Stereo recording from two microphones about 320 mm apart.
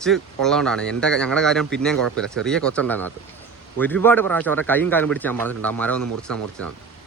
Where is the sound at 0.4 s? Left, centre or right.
Centre.